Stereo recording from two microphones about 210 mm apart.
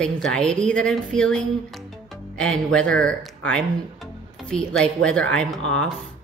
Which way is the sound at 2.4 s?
5° left (ahead or behind).